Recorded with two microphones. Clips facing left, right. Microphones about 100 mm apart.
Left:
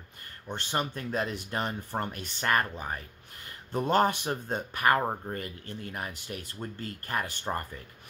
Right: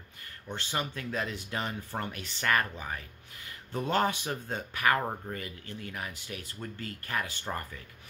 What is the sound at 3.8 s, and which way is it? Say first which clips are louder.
Speech: left 4 dB; 45° left (ahead or behind).